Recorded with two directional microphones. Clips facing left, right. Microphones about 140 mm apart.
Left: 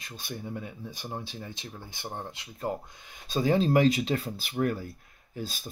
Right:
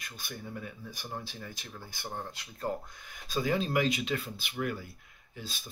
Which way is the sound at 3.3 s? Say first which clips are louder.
Left 6 dB; 30° left (ahead or behind).